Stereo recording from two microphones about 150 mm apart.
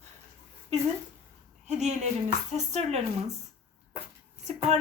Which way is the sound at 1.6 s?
50° right (ahead or behind).